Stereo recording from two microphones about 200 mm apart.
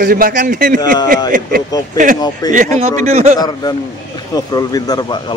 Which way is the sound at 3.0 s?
35° right (ahead or behind).